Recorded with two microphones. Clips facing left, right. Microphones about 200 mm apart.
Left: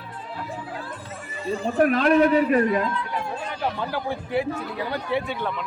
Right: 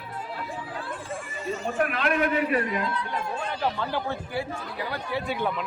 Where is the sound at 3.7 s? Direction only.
15° left (ahead or behind).